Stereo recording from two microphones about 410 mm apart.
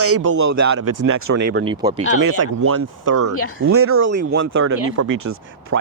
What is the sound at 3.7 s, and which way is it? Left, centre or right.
Speech, right.